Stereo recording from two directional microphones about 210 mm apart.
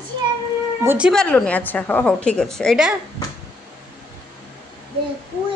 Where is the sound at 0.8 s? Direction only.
10° right (ahead or behind).